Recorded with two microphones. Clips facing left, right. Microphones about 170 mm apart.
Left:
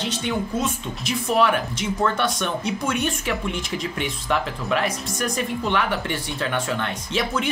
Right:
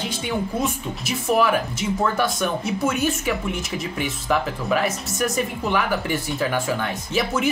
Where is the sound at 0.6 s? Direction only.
5° right (ahead or behind).